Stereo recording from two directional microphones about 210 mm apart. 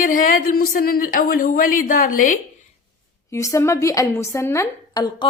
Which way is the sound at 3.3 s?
15° left (ahead or behind).